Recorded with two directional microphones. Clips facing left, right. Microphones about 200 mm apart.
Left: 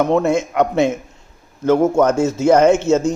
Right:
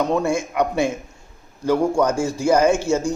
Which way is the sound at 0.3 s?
20° left (ahead or behind).